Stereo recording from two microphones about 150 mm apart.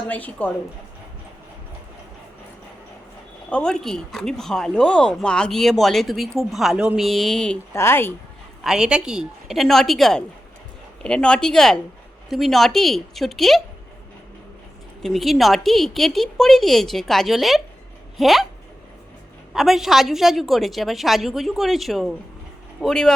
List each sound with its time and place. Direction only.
0.1 s a woman's voice: 10° left (ahead or behind)
3.5 s speech: 5° left (ahead or behind)
7.7 s a woman's voice: 15° left (ahead or behind)
8.6 s speech: 5° right (ahead or behind)
15.0 s speech: centre (ahead or behind)
19.5 s speech: centre (ahead or behind)